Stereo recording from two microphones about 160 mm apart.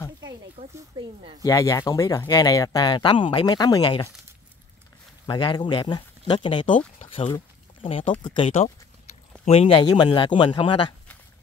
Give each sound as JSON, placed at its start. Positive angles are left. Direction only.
{"t": 0.6, "sound": "a sound", "side_deg": -35}
{"t": 1.0, "sound": "speech", "side_deg": -25}
{"t": 1.4, "sound": "speech", "side_deg": 20}
{"t": 5.2, "sound": "a man's voice", "side_deg": 30}